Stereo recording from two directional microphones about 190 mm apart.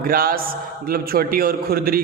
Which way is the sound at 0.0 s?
50° right (ahead or behind).